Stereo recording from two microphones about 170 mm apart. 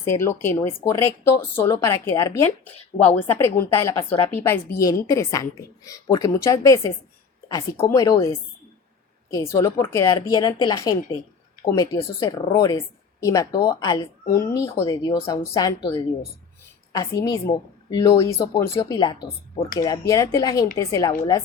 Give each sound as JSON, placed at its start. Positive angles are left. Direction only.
{"t": 0.1, "sound": "a woman's voice", "side_deg": 15}